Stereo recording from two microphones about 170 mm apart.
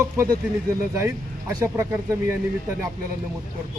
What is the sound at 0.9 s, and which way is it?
Speech, 20° right (ahead or behind).